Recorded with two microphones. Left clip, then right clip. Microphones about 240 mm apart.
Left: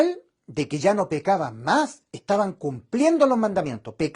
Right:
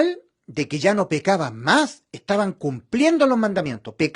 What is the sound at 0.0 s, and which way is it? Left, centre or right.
Speech, right.